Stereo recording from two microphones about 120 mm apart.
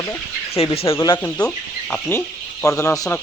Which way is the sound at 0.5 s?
55° left (ahead or behind).